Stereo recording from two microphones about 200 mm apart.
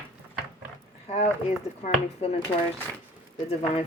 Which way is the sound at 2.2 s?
30° left (ahead or behind).